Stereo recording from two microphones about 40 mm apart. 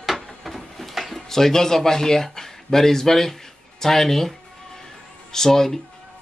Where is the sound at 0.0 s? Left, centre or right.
Centre.